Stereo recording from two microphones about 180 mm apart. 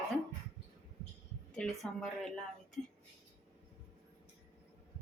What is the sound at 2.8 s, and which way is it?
Speech, 45° left (ahead or behind).